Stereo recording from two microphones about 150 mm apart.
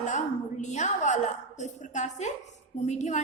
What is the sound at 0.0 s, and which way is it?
A woman's voice, 55° left (ahead or behind).